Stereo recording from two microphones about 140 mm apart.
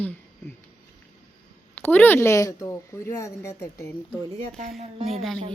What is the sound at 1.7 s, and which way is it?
A woman's voice, 15° left (ahead or behind).